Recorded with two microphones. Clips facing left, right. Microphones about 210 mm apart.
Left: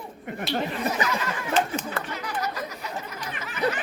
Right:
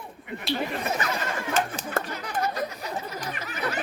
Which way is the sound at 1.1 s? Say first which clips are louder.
Left 2 dB; 45° right (ahead or behind).